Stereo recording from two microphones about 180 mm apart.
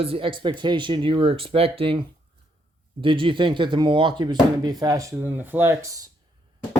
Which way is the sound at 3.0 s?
30° right (ahead or behind).